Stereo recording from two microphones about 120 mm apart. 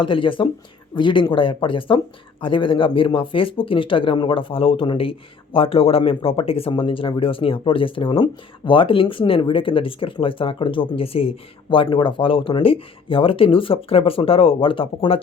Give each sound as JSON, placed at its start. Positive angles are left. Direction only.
{"t": 0.0, "sound": "speech", "side_deg": 45}